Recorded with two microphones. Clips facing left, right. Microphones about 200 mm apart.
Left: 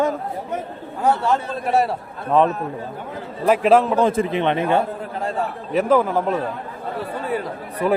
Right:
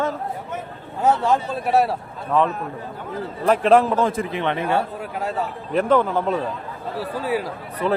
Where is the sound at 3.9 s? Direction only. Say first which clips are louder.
Left 3 dB; 25° left (ahead or behind).